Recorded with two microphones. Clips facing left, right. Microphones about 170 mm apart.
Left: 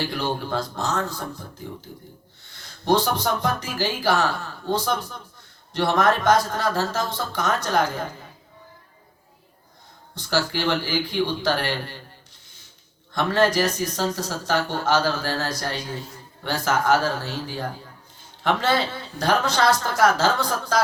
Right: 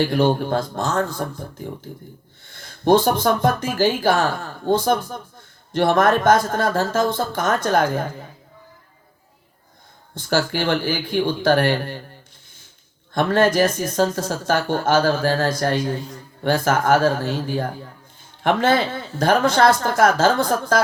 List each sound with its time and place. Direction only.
0.1 s speech: 50° right (ahead or behind)
2.5 s speech: 50° right (ahead or behind)
10.2 s speech: 50° right (ahead or behind)
13.1 s speech: 50° right (ahead or behind)